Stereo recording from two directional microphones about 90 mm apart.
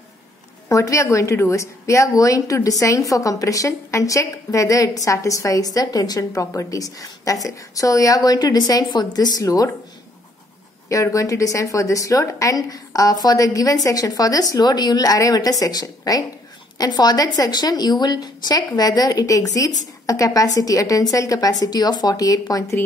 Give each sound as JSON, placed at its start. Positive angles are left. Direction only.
{"t": 0.7, "sound": "a woman's voice", "side_deg": 35}
{"t": 10.9, "sound": "a woman's voice", "side_deg": 35}